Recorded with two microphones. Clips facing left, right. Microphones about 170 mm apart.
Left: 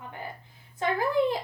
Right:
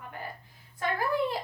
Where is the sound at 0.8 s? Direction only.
20° left (ahead or behind).